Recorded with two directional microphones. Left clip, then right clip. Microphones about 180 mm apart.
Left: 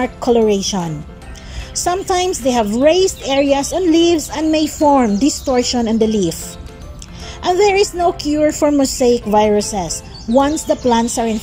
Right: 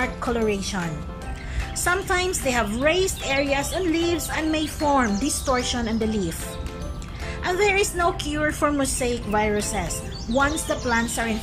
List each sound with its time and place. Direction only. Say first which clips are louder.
0.0 s a woman's voice: left 10 dB; 30° left (ahead or behind)
7.4 s a woman's voice: left 8 dB; 30° left (ahead or behind)